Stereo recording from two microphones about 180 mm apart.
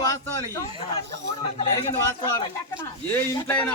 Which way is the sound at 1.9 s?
15° left (ahead or behind).